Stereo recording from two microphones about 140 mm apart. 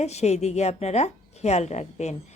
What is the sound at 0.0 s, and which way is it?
A woman's voice, 50° left (ahead or behind).